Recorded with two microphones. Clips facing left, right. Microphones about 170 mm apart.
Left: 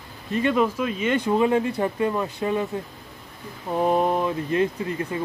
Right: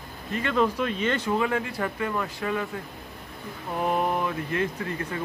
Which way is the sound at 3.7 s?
25° left (ahead or behind).